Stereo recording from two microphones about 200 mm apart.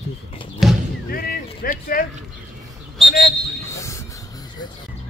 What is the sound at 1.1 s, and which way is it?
Speech, 50° left (ahead or behind).